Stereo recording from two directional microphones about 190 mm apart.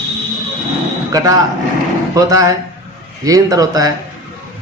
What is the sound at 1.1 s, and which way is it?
A man's voice, 20° right (ahead or behind).